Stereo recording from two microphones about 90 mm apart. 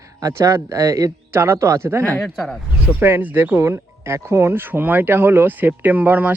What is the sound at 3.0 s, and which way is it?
Speech, 25° right (ahead or behind).